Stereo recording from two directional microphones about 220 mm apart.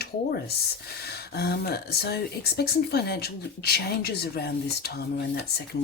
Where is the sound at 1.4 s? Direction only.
45° left (ahead or behind).